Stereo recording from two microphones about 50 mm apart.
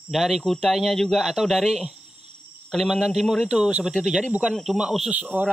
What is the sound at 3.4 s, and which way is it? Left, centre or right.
Speech, centre.